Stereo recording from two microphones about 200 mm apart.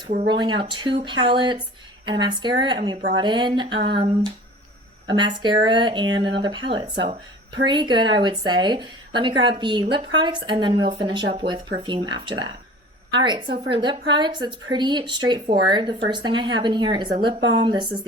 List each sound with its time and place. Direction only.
0.3 s a woman's voice: 20° right (ahead or behind)